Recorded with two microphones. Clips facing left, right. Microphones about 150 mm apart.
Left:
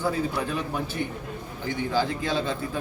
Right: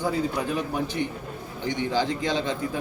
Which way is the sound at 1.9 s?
15° right (ahead or behind).